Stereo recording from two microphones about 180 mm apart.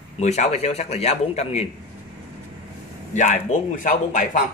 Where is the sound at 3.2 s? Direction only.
40° left (ahead or behind).